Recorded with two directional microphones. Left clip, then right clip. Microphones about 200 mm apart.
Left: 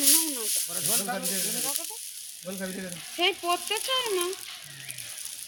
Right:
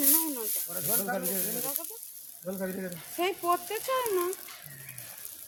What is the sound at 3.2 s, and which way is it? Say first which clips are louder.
Speech: left 2 dB; 15° right (ahead or behind).